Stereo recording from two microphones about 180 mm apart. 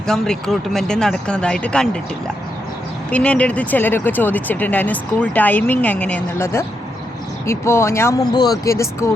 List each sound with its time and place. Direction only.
0.1 s speech: centre (ahead or behind)
3.1 s speech: 5° left (ahead or behind)